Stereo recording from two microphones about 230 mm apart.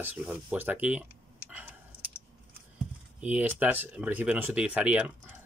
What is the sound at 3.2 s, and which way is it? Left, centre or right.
Speech, centre.